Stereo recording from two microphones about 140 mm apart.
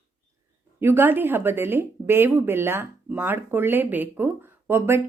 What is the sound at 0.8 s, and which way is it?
Speech, 15° right (ahead or behind).